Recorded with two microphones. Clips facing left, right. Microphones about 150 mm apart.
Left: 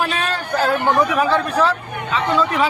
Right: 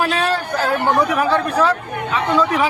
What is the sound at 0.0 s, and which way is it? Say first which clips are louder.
Speech: right 3 dB; 10° right (ahead or behind).